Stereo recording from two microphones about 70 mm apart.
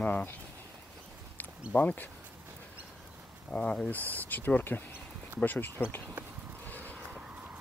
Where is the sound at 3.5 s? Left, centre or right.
Centre.